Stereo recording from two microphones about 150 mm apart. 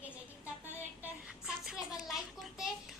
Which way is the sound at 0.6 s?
15° right (ahead or behind).